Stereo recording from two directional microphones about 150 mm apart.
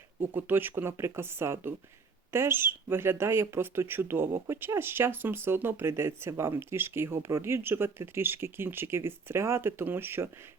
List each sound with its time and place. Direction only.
0.2 s speech: 15° right (ahead or behind)